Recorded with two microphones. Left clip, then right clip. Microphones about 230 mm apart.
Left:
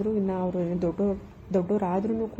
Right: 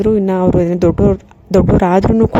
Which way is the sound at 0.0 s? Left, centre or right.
Right.